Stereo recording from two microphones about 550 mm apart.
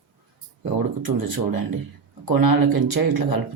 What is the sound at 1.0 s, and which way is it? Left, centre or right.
Speech, right.